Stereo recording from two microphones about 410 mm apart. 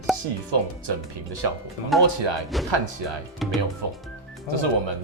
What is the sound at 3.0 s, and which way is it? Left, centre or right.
Speech, right.